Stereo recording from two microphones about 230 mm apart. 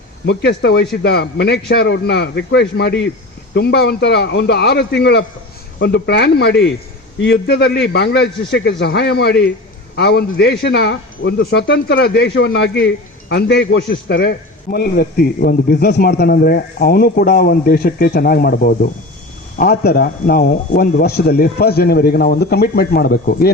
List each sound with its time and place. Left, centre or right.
0.3 s a man's voice: left